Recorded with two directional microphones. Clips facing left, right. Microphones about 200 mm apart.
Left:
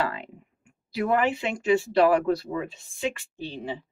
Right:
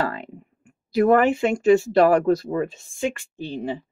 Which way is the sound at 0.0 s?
45° right (ahead or behind).